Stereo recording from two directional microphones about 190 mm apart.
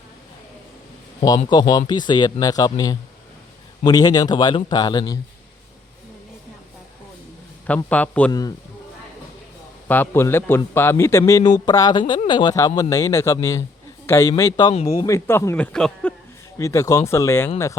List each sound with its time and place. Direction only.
1.5 s speech: 20° left (ahead or behind)
7.9 s speech: 5° left (ahead or behind)
8.3 s speech: 20° left (ahead or behind)
9.9 s speech: 10° left (ahead or behind)
15.0 s speech: 15° left (ahead or behind)